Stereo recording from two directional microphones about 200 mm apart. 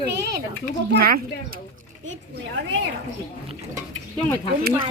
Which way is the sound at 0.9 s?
50° right (ahead or behind).